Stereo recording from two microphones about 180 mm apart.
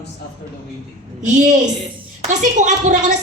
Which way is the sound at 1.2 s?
45° right (ahead or behind).